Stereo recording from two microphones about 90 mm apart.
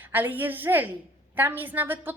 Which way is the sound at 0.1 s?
20° right (ahead or behind).